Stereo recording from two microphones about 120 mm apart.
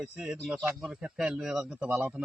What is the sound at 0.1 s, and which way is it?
Speech, 5° right (ahead or behind).